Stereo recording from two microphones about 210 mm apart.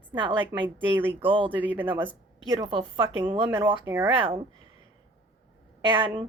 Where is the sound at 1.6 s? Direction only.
10° right (ahead or behind).